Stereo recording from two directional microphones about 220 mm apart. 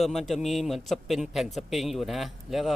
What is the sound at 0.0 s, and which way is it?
A man's voice, centre (ahead or behind).